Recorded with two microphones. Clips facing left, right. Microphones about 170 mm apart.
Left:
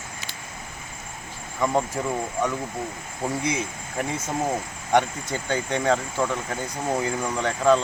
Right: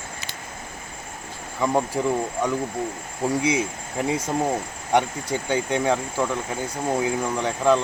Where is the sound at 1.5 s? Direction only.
10° right (ahead or behind).